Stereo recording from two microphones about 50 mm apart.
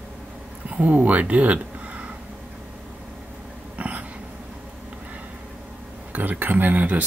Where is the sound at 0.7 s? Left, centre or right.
Right.